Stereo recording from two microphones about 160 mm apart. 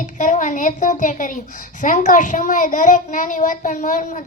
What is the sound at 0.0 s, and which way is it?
A woman's voice, 50° left (ahead or behind).